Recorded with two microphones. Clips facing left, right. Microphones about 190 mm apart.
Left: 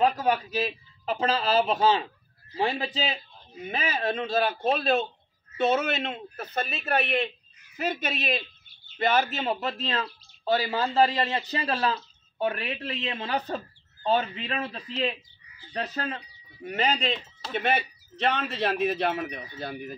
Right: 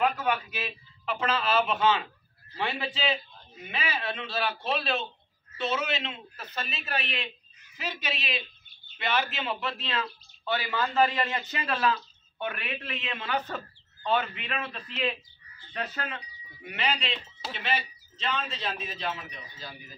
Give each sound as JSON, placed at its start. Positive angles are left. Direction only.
{"t": 0.0, "sound": "a man's voice", "side_deg": 35}